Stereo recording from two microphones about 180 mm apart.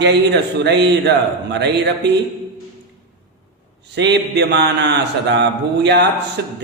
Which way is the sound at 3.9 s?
75° right (ahead or behind).